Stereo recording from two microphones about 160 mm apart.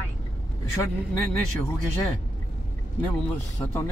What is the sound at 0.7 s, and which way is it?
Speech, 15° left (ahead or behind).